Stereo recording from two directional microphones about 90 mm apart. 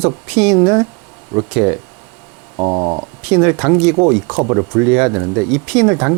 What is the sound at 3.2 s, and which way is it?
Speech, 15° right (ahead or behind).